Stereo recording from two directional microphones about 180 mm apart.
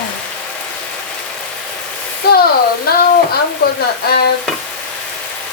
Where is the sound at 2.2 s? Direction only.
65° left (ahead or behind).